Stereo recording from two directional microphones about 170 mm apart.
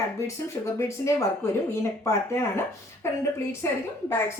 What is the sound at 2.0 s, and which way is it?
Speech, 15° left (ahead or behind).